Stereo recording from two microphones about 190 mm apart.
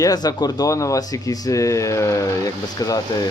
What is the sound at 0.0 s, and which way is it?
Speech, 20° left (ahead or behind).